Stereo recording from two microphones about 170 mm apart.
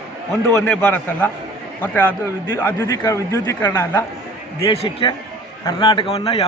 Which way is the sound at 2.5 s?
15° left (ahead or behind).